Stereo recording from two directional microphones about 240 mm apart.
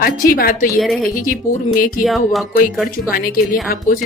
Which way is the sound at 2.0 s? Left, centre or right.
Centre.